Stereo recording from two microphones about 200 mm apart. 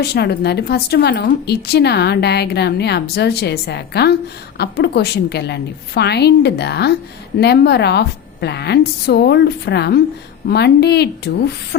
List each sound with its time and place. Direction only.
0.0 s a woman's voice: 55° left (ahead or behind)